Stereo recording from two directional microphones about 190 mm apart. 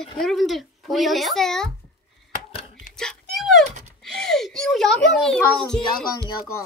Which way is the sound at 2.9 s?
Centre (ahead or behind).